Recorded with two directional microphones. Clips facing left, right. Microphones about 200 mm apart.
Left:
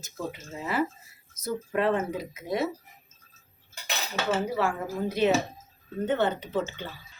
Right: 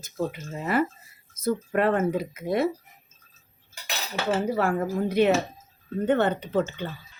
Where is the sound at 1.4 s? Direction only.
55° right (ahead or behind).